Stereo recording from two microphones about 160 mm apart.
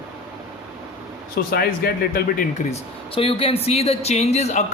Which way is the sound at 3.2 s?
35° left (ahead or behind).